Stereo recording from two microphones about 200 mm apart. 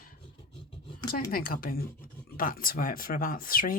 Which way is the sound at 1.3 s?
45° left (ahead or behind).